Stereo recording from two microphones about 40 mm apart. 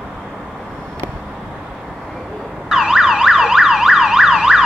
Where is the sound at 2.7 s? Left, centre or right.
Centre.